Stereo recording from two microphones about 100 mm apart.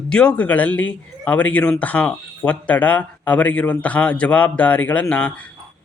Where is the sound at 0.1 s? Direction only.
10° left (ahead or behind).